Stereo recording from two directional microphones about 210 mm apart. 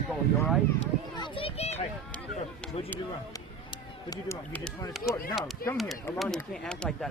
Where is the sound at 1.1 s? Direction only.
20° left (ahead or behind).